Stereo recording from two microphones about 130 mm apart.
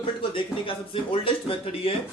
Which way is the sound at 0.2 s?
40° left (ahead or behind).